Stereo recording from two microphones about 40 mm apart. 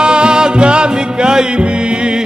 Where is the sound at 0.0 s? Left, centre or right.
Right.